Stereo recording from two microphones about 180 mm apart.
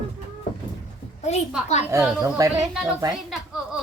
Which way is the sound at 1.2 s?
35° left (ahead or behind).